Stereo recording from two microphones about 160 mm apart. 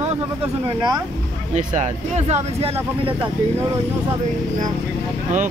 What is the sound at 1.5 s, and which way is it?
Speech, 45° right (ahead or behind).